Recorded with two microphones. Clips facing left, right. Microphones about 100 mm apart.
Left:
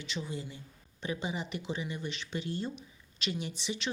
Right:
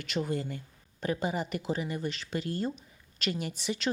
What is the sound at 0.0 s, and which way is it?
Speech, 55° right (ahead or behind).